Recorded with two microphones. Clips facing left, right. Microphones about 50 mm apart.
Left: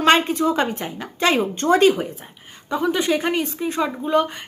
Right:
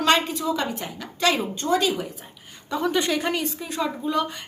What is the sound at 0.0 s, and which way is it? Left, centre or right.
Speech, left.